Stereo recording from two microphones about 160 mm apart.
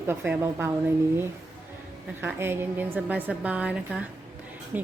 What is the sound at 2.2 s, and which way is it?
Speech, 15° right (ahead or behind).